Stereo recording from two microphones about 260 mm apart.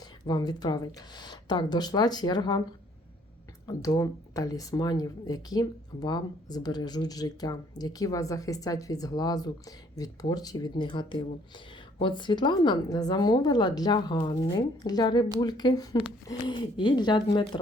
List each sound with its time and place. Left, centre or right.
0.0 s speech: centre
3.7 s speech: centre